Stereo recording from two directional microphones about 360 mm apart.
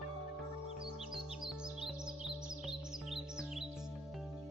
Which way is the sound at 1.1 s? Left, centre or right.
Centre.